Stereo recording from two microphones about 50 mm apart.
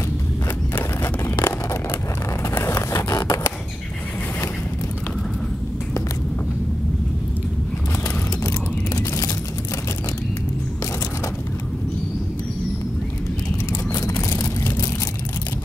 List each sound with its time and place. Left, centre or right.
1.4 s vehicle: left
2.6 s vehicle: left
8.5 s a sound: left